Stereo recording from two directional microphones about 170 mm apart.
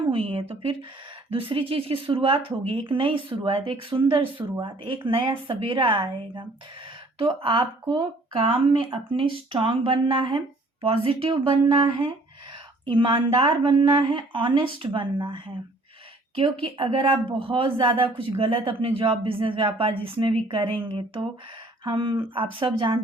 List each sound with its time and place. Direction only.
0.0 s speech: 30° right (ahead or behind)